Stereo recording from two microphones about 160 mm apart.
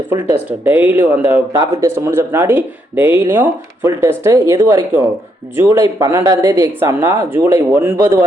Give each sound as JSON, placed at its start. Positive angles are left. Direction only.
{"t": 0.6, "sound": "speech", "side_deg": -10}